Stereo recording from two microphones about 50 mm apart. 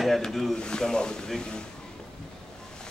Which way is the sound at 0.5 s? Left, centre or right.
Centre.